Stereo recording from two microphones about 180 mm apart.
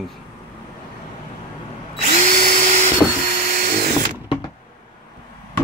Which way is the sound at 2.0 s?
35° right (ahead or behind).